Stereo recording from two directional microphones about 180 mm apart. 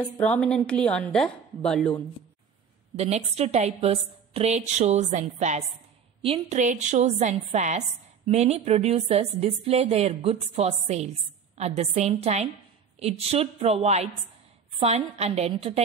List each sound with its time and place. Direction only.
0.0 s a woman's voice: 5° left (ahead or behind)
3.0 s a woman's voice: 35° right (ahead or behind)